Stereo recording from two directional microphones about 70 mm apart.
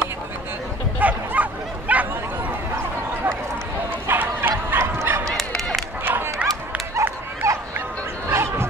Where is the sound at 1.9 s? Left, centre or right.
Right.